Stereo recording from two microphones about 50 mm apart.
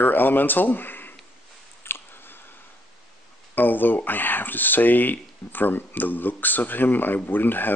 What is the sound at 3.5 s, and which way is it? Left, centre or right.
Speech, left.